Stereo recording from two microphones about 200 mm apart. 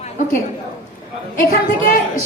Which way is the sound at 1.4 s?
45° left (ahead or behind).